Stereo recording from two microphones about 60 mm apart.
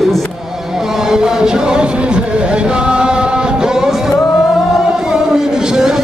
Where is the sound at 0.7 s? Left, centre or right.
Centre.